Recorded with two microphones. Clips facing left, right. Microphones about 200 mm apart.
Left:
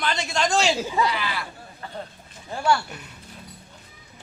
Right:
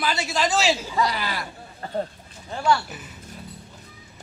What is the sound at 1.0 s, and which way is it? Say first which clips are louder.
Speech: even; 40° right (ahead or behind).